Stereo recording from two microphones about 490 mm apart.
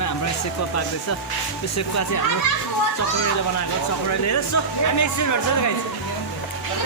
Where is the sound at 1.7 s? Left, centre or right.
Left.